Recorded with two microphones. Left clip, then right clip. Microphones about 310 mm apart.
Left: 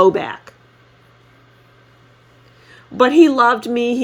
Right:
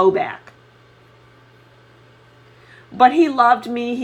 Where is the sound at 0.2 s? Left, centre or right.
Left.